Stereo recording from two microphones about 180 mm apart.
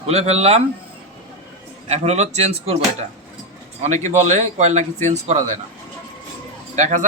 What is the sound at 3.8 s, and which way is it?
Speech, 40° right (ahead or behind).